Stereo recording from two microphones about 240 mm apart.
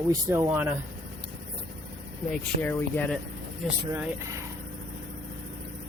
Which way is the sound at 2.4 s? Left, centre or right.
Centre.